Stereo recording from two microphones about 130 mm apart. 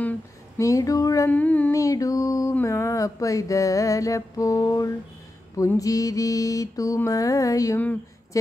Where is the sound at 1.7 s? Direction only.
25° left (ahead or behind).